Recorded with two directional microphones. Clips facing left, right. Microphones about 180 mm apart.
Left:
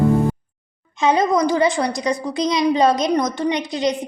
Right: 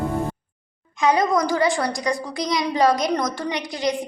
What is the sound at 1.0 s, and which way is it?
A woman's voice, 20° left (ahead or behind).